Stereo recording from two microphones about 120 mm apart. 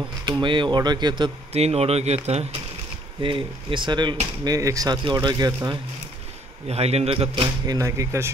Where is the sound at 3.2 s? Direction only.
45° right (ahead or behind).